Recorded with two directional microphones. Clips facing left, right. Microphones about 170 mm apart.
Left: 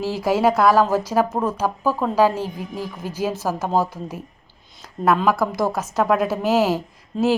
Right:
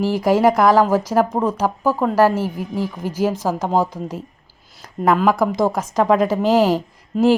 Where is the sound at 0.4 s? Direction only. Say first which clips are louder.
Right 1 dB; 10° right (ahead or behind).